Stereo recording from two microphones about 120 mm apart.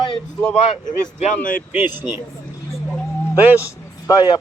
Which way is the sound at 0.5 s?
80° left.